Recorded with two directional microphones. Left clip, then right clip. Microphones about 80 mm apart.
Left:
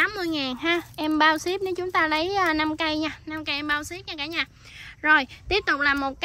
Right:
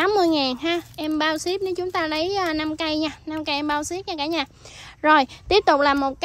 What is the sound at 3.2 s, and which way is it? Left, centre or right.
A woman's voice, right.